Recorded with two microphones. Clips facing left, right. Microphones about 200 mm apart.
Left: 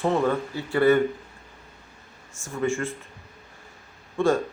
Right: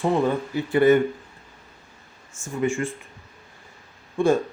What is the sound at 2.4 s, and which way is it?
Speech, 15° right (ahead or behind).